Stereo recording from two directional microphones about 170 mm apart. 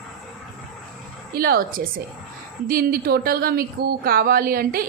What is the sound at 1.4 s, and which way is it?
A woman's voice, 60° right (ahead or behind).